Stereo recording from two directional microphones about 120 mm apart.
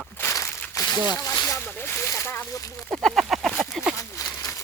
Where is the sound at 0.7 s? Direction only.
30° left (ahead or behind).